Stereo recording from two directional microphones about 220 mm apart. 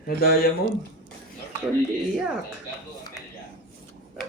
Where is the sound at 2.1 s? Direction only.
Centre (ahead or behind).